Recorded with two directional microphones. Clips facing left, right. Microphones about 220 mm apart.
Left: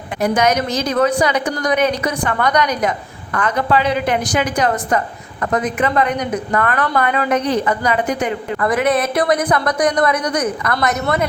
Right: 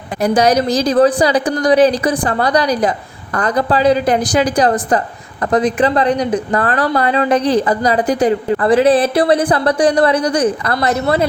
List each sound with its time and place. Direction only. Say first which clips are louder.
0.2 s a woman's voice: right 3 dB; 35° right (ahead or behind)